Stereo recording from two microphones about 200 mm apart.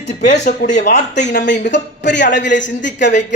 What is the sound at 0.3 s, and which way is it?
Speech, 40° left (ahead or behind).